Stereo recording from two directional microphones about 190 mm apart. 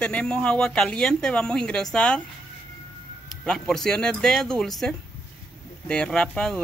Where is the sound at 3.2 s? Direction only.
Centre (ahead or behind).